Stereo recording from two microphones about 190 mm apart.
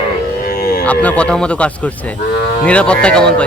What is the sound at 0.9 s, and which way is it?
Speech, 5° left (ahead or behind).